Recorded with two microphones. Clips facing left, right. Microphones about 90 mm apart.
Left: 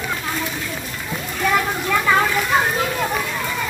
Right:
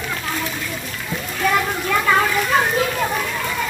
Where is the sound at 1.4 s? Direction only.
5° left (ahead or behind).